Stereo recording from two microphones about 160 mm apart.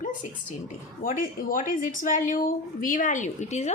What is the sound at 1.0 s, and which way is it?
A woman's voice, 55° left (ahead or behind).